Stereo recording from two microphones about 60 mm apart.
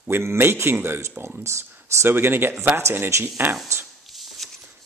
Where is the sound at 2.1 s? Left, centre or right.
Right.